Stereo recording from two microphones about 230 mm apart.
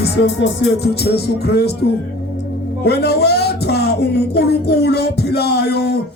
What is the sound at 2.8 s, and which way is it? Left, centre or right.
A man's voice, left.